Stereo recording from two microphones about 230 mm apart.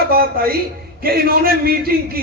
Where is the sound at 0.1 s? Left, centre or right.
Right.